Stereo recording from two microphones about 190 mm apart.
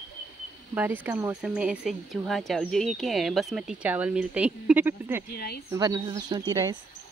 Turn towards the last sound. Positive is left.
turn(degrees=-20)  # may be behind; listen again after turning